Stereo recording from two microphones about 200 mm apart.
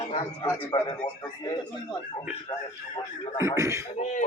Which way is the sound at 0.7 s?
20° left (ahead or behind).